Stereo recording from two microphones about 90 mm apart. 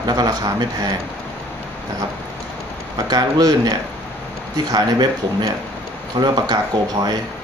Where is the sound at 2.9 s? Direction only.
45° right (ahead or behind).